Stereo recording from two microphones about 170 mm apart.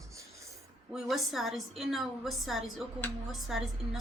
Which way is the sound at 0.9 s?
Centre (ahead or behind).